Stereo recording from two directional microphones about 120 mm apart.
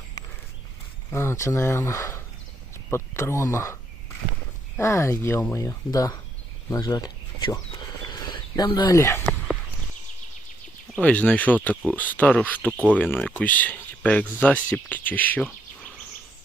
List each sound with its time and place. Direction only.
1.1 s speech: 20° left (ahead or behind)
4.8 s speech: 25° left (ahead or behind)
7.7 s a sound: 40° left (ahead or behind); by 9.2 s 25° left (ahead or behind)
10.9 s speech: 10° left (ahead or behind)